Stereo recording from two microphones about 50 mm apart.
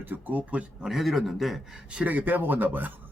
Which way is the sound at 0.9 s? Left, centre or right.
Centre.